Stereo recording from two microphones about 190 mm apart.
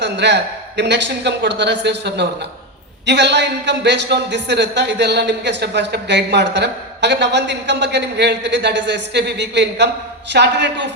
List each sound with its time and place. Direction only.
0.0 s a man's voice: 65° right (ahead or behind)